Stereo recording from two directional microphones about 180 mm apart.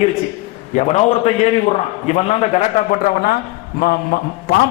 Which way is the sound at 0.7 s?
40° left (ahead or behind).